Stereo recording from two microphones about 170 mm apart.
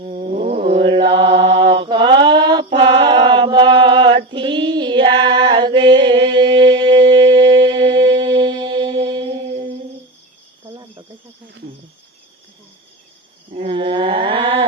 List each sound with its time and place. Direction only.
0.0 s mantra: 40° right (ahead or behind)
0.8 s mantra: 30° right (ahead or behind)
10.7 s cricket: 30° right (ahead or behind)
13.6 s a sound: 30° right (ahead or behind)